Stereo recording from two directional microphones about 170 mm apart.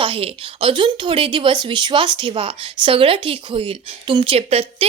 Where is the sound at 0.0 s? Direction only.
30° right (ahead or behind).